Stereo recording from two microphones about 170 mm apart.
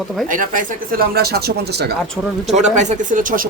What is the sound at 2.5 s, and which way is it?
Speech, 40° right (ahead or behind).